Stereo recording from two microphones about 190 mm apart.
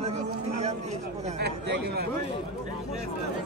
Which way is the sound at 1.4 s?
60° right (ahead or behind).